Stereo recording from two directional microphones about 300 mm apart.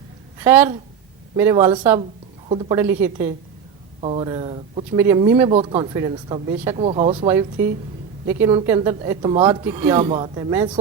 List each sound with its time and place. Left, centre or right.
0.3 s a woman's voice: centre